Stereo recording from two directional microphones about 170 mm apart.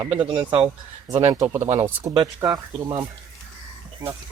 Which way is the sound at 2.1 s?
20° right (ahead or behind).